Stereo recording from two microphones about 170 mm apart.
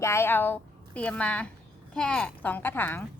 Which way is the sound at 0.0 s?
15° left (ahead or behind).